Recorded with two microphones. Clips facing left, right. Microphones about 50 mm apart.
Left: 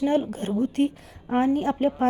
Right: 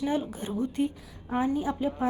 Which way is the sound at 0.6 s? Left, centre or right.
Left.